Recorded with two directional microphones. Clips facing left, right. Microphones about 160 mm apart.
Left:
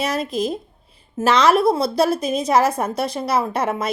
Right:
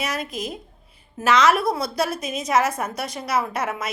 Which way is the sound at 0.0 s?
30° left (ahead or behind).